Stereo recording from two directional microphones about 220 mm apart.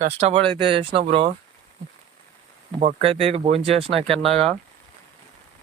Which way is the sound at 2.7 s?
25° right (ahead or behind).